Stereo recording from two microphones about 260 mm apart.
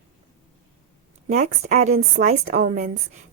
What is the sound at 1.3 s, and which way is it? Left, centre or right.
A woman's voice, right.